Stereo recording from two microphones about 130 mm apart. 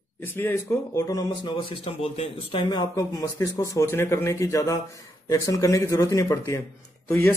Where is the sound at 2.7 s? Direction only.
30° left (ahead or behind).